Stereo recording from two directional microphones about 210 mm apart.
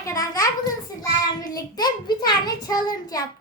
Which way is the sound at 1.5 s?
20° left (ahead or behind).